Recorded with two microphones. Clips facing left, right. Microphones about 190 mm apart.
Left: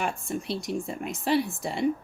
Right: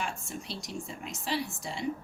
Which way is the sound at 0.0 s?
55° left (ahead or behind).